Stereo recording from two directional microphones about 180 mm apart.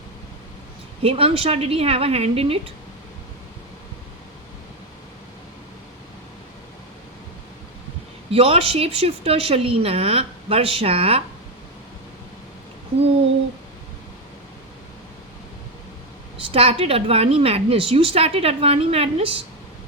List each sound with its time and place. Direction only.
1.0 s a woman's voice: 30° right (ahead or behind)
8.3 s a woman's voice: 30° right (ahead or behind)
16.4 s a woman's voice: 30° right (ahead or behind)